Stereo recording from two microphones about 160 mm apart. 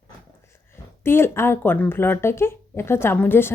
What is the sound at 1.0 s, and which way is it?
Speech, 15° left (ahead or behind).